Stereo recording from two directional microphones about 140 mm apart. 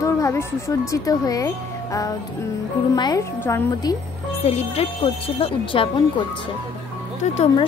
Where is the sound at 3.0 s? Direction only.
30° left (ahead or behind).